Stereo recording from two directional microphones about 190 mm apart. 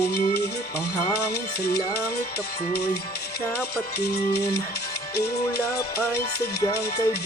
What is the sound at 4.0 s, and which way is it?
Speech, 55° left (ahead or behind).